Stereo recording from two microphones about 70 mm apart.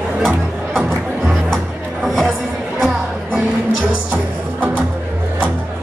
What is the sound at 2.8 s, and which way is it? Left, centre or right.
Music, centre.